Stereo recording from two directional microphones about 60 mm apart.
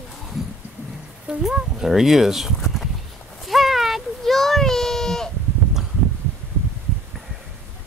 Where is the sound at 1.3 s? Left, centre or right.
Centre.